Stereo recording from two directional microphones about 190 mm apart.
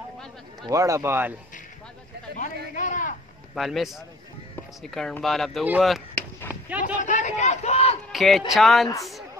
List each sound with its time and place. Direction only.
0.7 s a man's voice: 15° right (ahead or behind)
2.7 s a sound: 40° left (ahead or behind)
3.5 s speech: centre (ahead or behind)
5.7 s chop: centre (ahead or behind)
7.1 s a sound: 40° left (ahead or behind)
8.1 s speech: centre (ahead or behind)